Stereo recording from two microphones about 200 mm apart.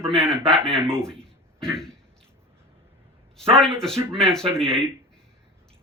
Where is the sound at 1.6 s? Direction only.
5° left (ahead or behind).